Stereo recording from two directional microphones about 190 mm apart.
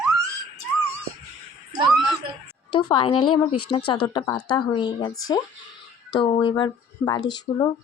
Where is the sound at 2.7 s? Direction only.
25° left (ahead or behind).